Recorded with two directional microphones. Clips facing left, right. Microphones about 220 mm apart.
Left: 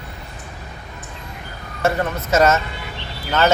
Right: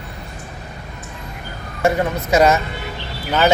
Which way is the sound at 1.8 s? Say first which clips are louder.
Right 3 dB; 15° right (ahead or behind).